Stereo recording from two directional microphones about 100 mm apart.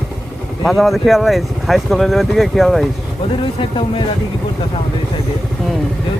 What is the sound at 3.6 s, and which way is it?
Speech, 55° left (ahead or behind).